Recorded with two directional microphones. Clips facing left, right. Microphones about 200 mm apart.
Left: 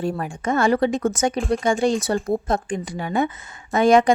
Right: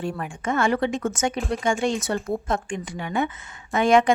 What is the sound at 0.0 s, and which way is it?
Speech, 35° left (ahead or behind).